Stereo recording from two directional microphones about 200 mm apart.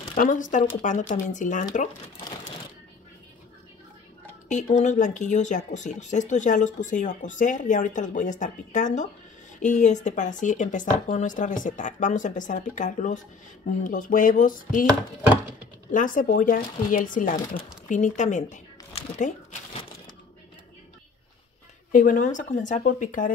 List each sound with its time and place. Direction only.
0.1 s speech: 40° left (ahead or behind)
4.5 s speech: 35° left (ahead or behind)
15.9 s speech: 40° left (ahead or behind)
21.9 s speech: 40° left (ahead or behind)